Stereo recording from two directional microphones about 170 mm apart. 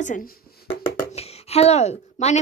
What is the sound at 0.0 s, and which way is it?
Speech, 55° left (ahead or behind).